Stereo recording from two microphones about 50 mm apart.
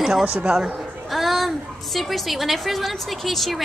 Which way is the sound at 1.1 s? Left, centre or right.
Centre.